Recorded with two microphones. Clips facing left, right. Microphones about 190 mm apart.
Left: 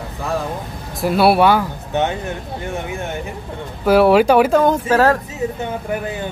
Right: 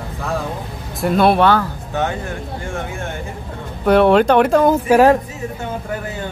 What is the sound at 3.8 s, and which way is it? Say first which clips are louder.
Speech: even; 5° left (ahead or behind).